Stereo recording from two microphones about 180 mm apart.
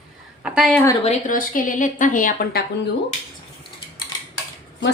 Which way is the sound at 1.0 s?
50° left (ahead or behind).